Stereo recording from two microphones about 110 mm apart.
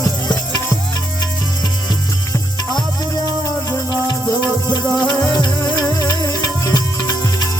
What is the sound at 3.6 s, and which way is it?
Music, 30° left (ahead or behind).